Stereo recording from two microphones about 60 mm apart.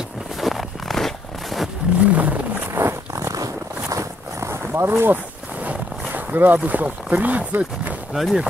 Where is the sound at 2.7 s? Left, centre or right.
Right.